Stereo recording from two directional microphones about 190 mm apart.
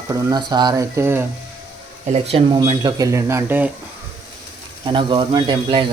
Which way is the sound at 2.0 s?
30° right (ahead or behind).